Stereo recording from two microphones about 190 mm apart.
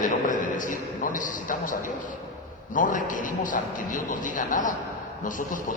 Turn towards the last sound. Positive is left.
turn(degrees=45)  # may be behind; listen again after turning